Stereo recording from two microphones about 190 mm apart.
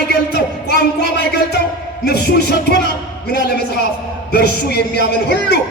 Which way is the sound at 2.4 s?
45° right (ahead or behind).